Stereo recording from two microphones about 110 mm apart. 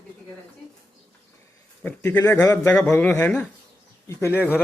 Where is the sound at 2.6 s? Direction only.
10° left (ahead or behind).